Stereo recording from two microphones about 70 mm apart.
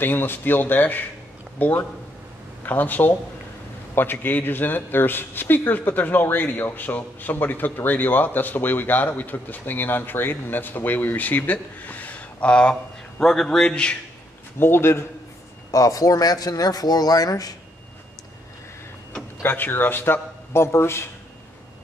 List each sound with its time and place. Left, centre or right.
0.0 s a man's voice: left; by 13.9 s centre
14.6 s a man's voice: left
15.7 s speech: left
19.4 s a man's voice: left